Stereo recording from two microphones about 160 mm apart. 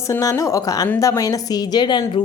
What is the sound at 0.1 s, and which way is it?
A woman's voice, 20° left (ahead or behind).